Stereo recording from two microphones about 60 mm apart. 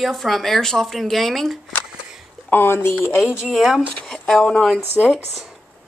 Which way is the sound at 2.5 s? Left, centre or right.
Left.